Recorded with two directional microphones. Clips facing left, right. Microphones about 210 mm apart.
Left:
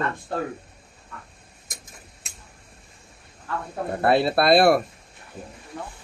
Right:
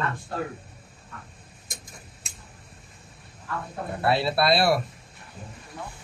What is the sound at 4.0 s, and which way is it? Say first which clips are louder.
Speech: left 4 dB; 50° left (ahead or behind).